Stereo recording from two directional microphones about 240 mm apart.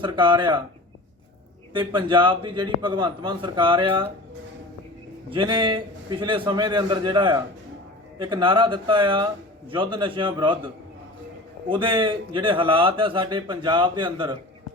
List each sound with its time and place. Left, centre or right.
0.0 s a man's voice: centre
1.7 s a man's voice: right
5.3 s a man's voice: centre
11.7 s a man's voice: right